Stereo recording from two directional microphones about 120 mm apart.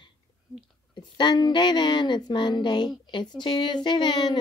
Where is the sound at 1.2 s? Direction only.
35° left (ahead or behind).